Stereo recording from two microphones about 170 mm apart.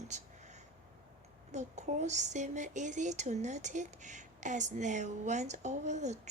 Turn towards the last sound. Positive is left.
turn(degrees=-45)  # may be behind; listen again after turning